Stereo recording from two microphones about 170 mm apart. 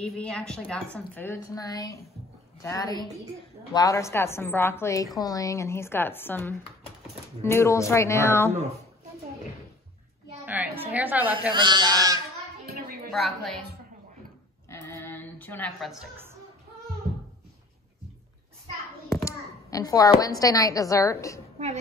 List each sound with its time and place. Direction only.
0.0 s a woman's voice: 5° left (ahead or behind)
10.4 s a woman's voice: 10° right (ahead or behind)
11.5 s speech: 25° right (ahead or behind)
13.1 s speech: centre (ahead or behind)
14.7 s sheep: 15° left (ahead or behind)
15.9 s speech: 5° right (ahead or behind)
19.2 s a woman's voice: 20° left (ahead or behind)